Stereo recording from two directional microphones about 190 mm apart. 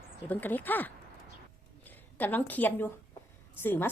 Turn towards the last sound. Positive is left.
turn(degrees=10)  # may be behind; listen again after turning